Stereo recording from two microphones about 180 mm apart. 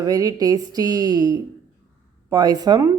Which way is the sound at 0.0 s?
20° right (ahead or behind).